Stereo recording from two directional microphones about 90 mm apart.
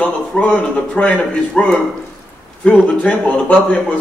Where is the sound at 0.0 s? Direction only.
15° left (ahead or behind).